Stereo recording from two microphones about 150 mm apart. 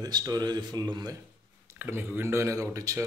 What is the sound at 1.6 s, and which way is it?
Speech, 15° right (ahead or behind).